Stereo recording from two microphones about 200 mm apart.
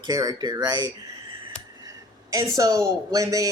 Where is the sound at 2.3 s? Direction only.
15° right (ahead or behind).